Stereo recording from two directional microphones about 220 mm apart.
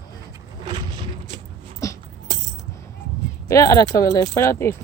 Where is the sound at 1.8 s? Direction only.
15° left (ahead or behind).